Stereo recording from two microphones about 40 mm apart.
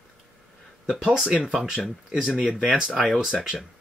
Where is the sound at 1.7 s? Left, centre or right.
Centre.